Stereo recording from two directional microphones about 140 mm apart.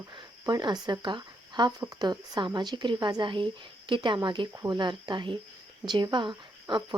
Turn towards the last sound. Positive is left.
turn(degrees=-35)  # may be behind; listen again after turning